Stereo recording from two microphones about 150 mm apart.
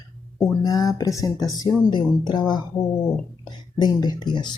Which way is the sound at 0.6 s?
25° left (ahead or behind).